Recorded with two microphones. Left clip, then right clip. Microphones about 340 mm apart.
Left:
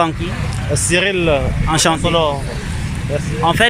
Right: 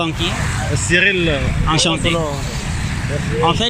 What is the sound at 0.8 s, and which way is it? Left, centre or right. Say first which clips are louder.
Speech: even; left.